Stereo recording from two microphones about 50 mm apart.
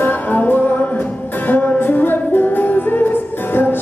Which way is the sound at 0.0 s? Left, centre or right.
Left.